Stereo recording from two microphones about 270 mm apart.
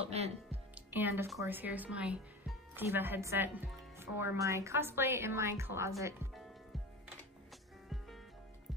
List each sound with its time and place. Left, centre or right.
0.0 s speech: right
0.7 s a woman's voice: centre